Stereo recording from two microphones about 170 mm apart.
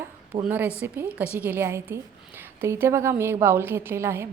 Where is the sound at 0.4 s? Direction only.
10° right (ahead or behind).